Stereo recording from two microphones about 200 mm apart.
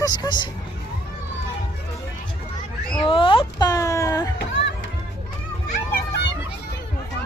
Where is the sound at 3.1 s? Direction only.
25° left (ahead or behind).